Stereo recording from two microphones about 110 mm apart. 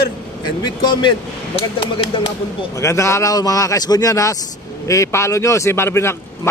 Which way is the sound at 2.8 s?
25° left (ahead or behind).